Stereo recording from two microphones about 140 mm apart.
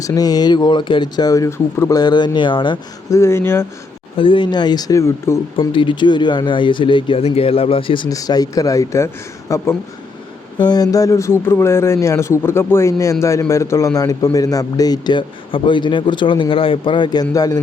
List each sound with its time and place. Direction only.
0.0 s speech: 25° left (ahead or behind)
3.1 s speech: 20° left (ahead or behind)
4.2 s speech: 35° left (ahead or behind); by 5.4 s 20° left (ahead or behind)
5.5 s speech: 35° left (ahead or behind)